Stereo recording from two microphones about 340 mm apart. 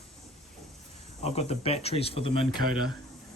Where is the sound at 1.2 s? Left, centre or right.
Centre.